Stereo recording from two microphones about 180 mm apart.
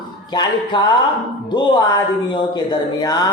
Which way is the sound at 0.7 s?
25° left (ahead or behind).